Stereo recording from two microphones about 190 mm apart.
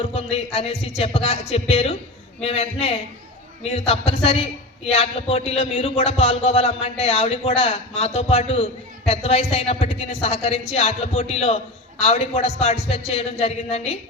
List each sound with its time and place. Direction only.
0.0 s a man's voice: 30° left (ahead or behind)